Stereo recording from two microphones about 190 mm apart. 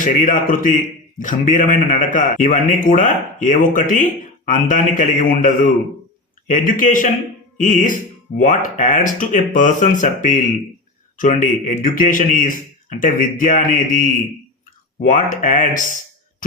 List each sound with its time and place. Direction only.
0.0 s speech: 45° left (ahead or behind)
15.1 s speech: 45° left (ahead or behind)